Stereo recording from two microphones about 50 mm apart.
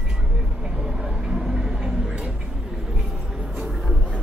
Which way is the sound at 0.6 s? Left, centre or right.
Centre.